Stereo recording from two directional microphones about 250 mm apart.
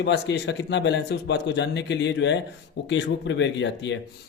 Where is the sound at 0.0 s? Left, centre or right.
Left.